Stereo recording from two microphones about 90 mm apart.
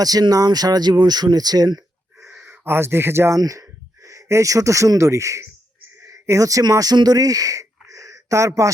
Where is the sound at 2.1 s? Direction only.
30° right (ahead or behind).